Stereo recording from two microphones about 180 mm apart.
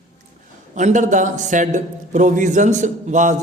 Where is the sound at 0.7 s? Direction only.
45° right (ahead or behind).